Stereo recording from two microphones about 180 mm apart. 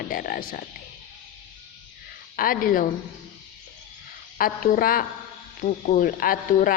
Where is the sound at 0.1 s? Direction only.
50° left (ahead or behind).